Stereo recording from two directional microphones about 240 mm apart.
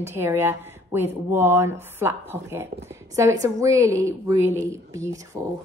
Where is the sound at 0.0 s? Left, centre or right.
Centre.